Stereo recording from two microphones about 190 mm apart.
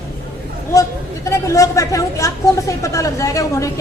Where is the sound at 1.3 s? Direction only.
15° left (ahead or behind).